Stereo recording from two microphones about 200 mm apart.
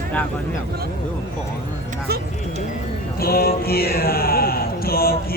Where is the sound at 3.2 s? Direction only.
50° left (ahead or behind).